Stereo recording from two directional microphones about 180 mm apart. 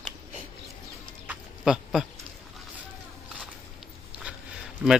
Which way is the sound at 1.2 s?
5° right (ahead or behind).